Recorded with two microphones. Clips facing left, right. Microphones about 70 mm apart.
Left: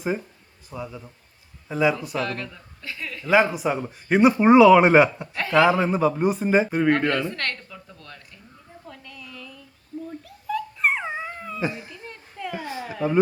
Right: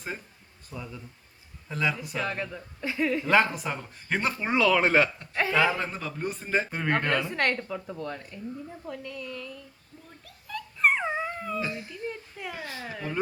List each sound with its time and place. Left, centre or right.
0.7 s a man's voice: centre
2.2 s speech: centre
3.2 s speech: centre
6.9 s speech: centre
8.9 s speech: centre
10.2 s dog: centre
11.6 s speech: left
12.0 s a sound: centre
12.5 s speech: left